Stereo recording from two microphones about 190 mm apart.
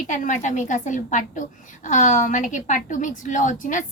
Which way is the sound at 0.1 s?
40° left (ahead or behind).